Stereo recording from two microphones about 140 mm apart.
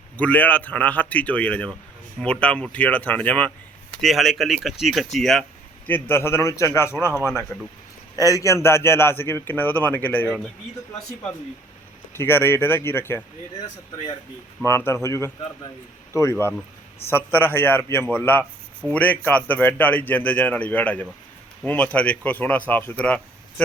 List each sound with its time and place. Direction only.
0.2 s a man's voice: 10° left (ahead or behind)
4.0 s speech: centre (ahead or behind)
5.9 s a man's voice: 15° left (ahead or behind)
7.2 s speech: centre (ahead or behind)
8.1 s a man's voice: 25° left (ahead or behind)
12.1 s a man's voice: 15° left (ahead or behind)
14.6 s a man's voice: 15° left (ahead or behind)